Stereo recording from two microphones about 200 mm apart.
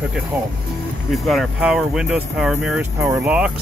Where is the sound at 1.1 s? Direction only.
Centre (ahead or behind).